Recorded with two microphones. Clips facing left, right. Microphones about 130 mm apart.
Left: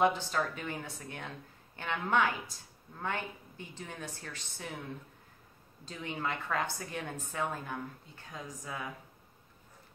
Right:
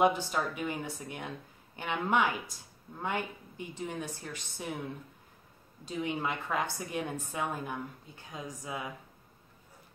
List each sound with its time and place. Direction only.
0.0 s a woman's voice: 15° right (ahead or behind)
5.9 s a woman's voice: 15° right (ahead or behind)